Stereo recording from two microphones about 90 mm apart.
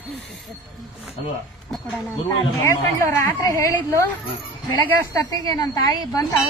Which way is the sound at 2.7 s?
30° left (ahead or behind).